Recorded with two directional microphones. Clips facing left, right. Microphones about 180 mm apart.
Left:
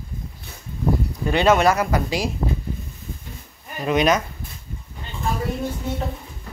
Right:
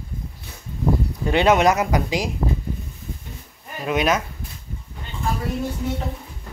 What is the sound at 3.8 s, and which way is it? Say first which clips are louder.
Speech: left 2 dB; 5° right (ahead or behind).